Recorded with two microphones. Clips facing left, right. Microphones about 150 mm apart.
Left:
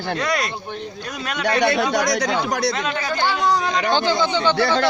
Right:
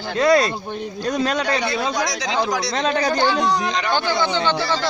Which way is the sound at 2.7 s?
35° right (ahead or behind).